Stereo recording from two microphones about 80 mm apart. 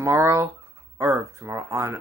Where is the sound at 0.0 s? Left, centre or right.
Right.